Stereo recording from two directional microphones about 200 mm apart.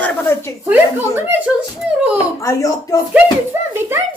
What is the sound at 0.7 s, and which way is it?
Speech, 10° right (ahead or behind).